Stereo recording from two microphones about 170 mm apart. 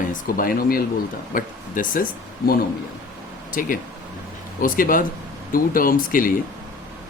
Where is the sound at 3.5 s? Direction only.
50° left (ahead or behind).